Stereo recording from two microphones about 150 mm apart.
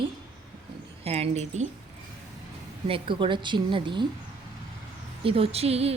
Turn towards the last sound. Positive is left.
turn(degrees=-40)  # may be behind; listen again after turning